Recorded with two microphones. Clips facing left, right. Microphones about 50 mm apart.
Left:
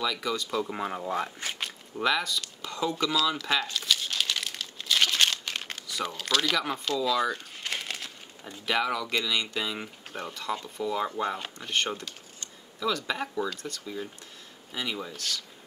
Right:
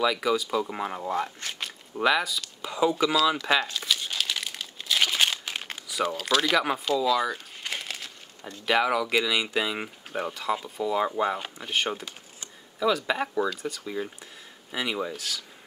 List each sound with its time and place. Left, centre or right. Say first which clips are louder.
0.0 s speech: right 6 dB; centre
2.0 s a sound: right 3 dB; centre
6.8 s crumpling: right 3 dB; centre
8.6 s speech: right 4 dB; centre